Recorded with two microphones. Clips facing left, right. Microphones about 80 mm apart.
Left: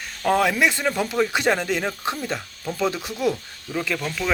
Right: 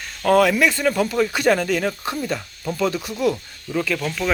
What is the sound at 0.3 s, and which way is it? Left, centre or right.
Speech, left.